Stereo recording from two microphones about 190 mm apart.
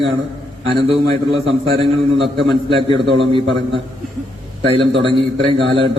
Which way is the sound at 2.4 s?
30° right (ahead or behind).